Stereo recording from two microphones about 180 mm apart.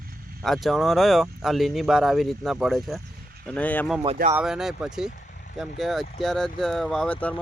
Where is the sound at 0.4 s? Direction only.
Centre (ahead or behind).